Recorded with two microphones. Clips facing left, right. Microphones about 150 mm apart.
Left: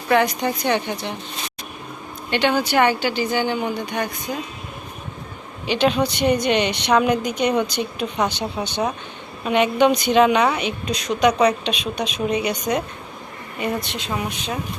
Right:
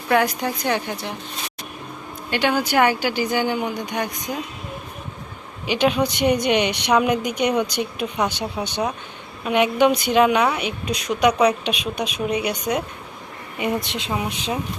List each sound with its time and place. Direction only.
0.1 s a woman's voice: 10° right (ahead or behind)
2.3 s a woman's voice: 10° right (ahead or behind)
5.6 s a woman's voice: 10° right (ahead or behind)
13.6 s speech: 20° right (ahead or behind)